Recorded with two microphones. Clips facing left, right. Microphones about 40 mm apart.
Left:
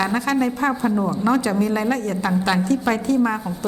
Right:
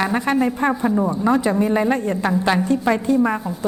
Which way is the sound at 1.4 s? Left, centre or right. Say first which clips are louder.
Right 2 dB; centre.